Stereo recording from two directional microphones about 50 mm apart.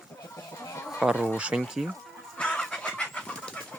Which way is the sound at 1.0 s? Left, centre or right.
Centre.